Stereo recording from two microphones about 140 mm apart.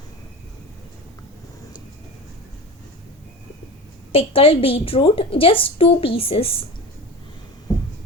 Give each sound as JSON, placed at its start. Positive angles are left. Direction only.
{"t": 4.1, "sound": "a woman's voice", "side_deg": 40}